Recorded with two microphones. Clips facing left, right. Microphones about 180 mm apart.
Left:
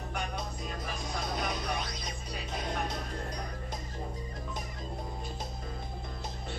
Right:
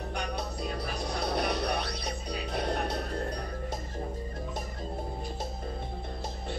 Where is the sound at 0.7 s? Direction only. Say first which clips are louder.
Right 4 dB; 70° right (ahead or behind).